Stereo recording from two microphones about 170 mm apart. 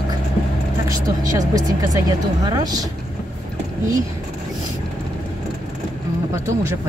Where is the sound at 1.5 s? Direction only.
20° right (ahead or behind).